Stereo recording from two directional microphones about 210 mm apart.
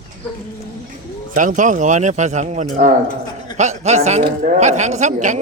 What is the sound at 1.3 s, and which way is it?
Speech, 35° right (ahead or behind).